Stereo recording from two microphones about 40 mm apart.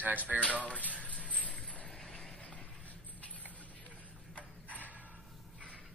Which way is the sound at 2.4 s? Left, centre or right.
Left.